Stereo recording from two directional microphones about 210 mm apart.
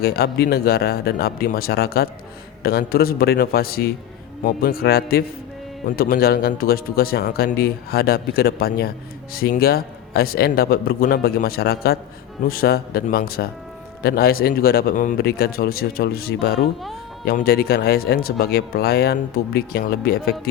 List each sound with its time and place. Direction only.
0.0 s speech: 50° left (ahead or behind)